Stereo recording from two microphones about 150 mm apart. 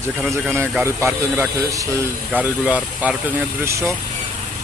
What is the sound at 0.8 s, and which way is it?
Speech, 15° right (ahead or behind).